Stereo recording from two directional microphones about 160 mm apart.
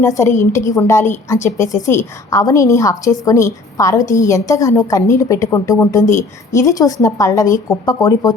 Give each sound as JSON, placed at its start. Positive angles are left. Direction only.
{"t": 0.0, "sound": "a woman's voice", "side_deg": 15}
{"t": 1.6, "sound": "a woman's voice", "side_deg": 50}
{"t": 1.9, "sound": "a woman's voice", "side_deg": 20}